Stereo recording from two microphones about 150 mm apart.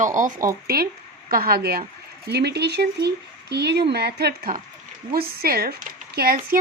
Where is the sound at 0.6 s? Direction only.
90° right.